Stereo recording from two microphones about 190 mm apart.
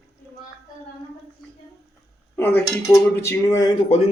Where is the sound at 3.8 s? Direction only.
30° left (ahead or behind).